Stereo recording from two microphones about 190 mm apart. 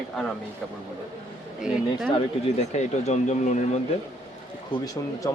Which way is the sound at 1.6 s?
5° right (ahead or behind).